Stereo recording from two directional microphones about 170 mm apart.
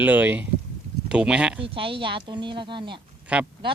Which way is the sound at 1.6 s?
30° right (ahead or behind).